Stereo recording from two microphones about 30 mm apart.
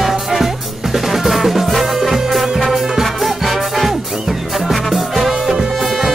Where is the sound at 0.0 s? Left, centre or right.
Centre.